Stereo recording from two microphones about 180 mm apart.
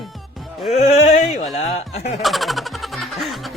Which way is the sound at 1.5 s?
35° left (ahead or behind).